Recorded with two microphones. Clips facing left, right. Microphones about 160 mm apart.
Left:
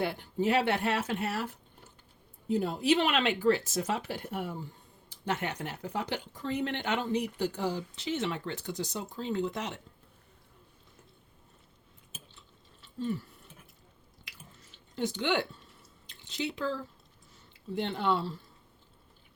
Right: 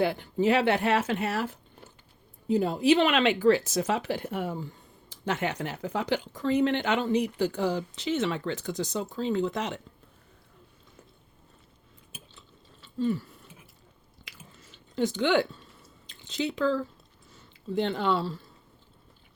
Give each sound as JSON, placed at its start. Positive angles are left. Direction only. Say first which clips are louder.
{"t": 0.0, "sound": "speech", "louder": "right 5 dB", "side_deg": -90}
{"t": 12.8, "sound": "a sound", "louder": "right 6 dB", "side_deg": -90}
{"t": 14.3, "sound": "chewing", "louder": "right 3 dB", "side_deg": -90}
{"t": 17.3, "sound": "speech", "louder": "right 6 dB", "side_deg": -90}